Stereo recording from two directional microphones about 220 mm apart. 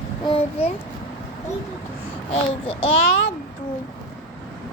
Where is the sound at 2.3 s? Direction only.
25° left (ahead or behind).